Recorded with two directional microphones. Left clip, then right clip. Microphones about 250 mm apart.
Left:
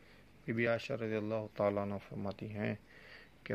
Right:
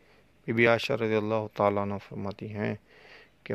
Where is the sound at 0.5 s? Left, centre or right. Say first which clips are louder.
Right 11 dB; right.